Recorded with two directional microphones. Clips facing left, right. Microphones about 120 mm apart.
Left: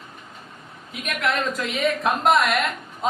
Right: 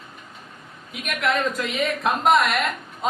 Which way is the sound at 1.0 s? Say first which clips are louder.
Right 1 dB; centre (ahead or behind).